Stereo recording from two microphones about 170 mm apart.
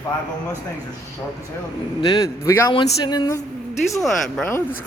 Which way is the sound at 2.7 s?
25° left (ahead or behind).